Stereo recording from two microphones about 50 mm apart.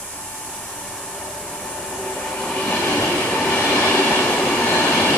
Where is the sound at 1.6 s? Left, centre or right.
Centre.